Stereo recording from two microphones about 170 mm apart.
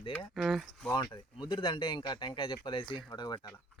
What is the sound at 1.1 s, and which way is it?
Speech, 30° left (ahead or behind).